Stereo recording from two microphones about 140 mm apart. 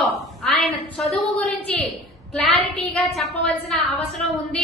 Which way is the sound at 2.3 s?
5° left (ahead or behind).